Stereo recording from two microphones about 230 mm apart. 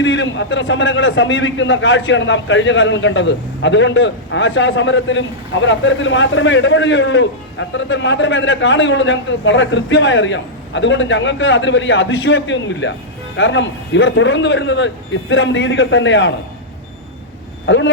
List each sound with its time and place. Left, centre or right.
0.0 s a man's voice: left
17.7 s a man's voice: left